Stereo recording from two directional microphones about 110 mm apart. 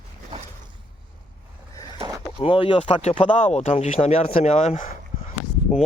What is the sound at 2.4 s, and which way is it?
Speech, 55° left (ahead or behind).